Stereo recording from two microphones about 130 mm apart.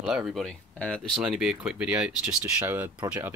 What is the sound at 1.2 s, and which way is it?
Speech, 5° right (ahead or behind).